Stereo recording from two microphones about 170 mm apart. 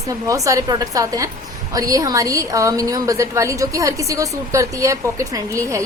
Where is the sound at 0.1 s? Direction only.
20° right (ahead or behind).